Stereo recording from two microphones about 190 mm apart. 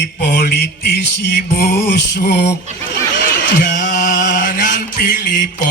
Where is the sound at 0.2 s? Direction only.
55° left (ahead or behind).